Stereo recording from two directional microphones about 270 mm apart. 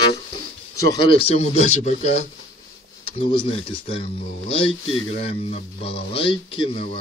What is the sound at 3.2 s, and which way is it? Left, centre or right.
Speech, left.